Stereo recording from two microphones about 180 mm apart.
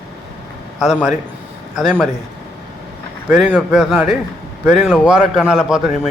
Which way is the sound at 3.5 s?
5° right (ahead or behind).